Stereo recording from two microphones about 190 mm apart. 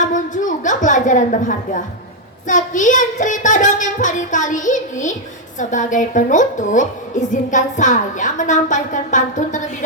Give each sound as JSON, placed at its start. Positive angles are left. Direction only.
{"t": 0.0, "sound": "a woman's voice", "side_deg": 40}